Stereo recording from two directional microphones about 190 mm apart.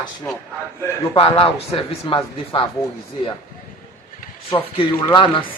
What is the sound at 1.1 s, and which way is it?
Speech, 30° left (ahead or behind).